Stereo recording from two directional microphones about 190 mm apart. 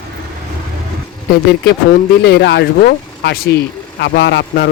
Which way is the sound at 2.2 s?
65° left (ahead or behind).